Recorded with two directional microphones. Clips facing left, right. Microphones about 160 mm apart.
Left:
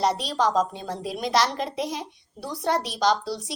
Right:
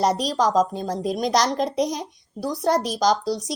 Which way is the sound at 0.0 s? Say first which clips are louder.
Right 3 dB; 45° right (ahead or behind).